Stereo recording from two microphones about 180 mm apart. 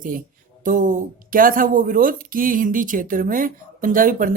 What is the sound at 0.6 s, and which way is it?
Speech, 45° right (ahead or behind).